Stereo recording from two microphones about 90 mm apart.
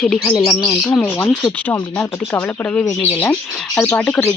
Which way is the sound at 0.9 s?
15° left (ahead or behind).